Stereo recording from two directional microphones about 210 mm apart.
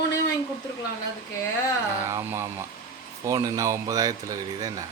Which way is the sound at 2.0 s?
15° right (ahead or behind).